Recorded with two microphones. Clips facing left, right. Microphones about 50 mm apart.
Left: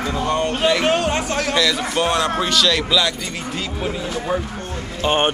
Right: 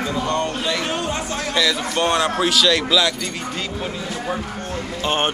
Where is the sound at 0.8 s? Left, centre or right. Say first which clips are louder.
Left 6 dB; left.